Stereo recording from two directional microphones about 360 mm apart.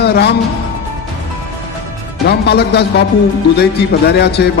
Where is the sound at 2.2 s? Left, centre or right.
Left.